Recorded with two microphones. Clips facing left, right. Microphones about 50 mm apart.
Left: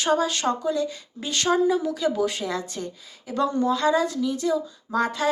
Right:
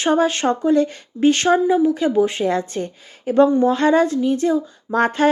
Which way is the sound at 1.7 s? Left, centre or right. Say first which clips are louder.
Right 8 dB; right.